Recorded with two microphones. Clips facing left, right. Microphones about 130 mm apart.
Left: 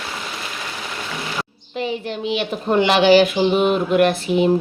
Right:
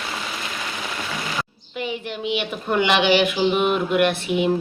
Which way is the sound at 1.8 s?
35° left (ahead or behind).